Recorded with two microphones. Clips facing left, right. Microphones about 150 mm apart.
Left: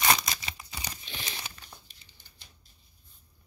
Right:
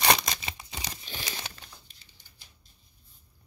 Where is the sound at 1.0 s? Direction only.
40° right (ahead or behind).